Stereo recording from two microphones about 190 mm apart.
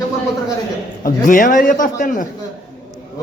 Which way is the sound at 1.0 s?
45° left (ahead or behind).